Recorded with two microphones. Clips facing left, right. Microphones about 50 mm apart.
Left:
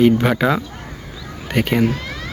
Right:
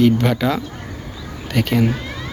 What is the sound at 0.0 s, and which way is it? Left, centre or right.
A man's voice, centre.